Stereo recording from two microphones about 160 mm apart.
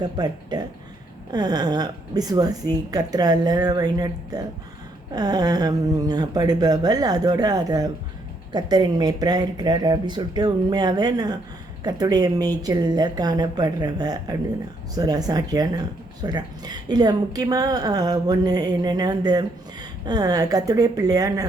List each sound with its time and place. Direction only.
0.0 s speech: 25° right (ahead or behind)